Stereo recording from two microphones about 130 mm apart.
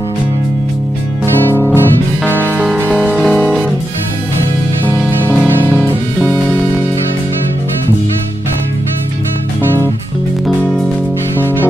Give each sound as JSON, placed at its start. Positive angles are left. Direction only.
{"t": 1.2, "sound": "music", "side_deg": 20}
{"t": 2.9, "sound": "music", "side_deg": 0}
{"t": 4.8, "sound": "music", "side_deg": 15}